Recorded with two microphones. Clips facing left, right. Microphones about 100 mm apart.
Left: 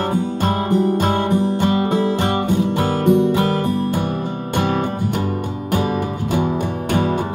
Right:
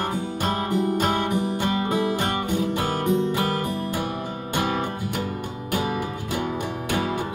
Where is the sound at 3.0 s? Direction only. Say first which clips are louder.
Left 9 dB; 65° left (ahead or behind).